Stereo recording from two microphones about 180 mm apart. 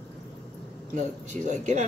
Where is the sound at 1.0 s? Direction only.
45° right (ahead or behind).